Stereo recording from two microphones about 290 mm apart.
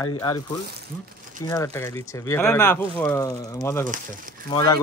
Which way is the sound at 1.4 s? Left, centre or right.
Centre.